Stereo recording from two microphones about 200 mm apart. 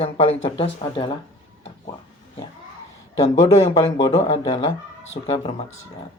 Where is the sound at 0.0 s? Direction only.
30° left (ahead or behind).